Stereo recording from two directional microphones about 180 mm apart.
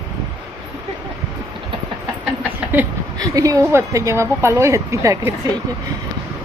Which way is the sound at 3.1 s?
20° right (ahead or behind).